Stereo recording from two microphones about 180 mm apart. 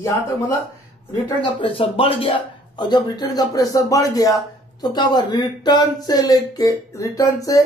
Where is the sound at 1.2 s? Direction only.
25° left (ahead or behind).